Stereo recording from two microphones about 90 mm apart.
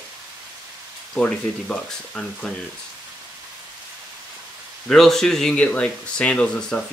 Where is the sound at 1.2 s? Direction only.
15° left (ahead or behind).